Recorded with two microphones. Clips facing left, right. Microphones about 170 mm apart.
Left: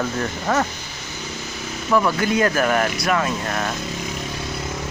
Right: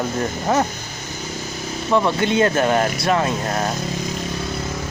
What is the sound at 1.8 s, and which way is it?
Speech, 25° right (ahead or behind).